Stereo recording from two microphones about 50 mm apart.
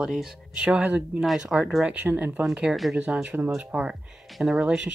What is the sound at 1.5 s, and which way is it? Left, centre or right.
Speech, centre.